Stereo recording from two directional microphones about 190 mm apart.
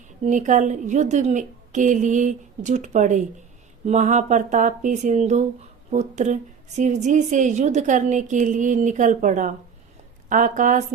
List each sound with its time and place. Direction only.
0.3 s a woman's voice: 40° right (ahead or behind)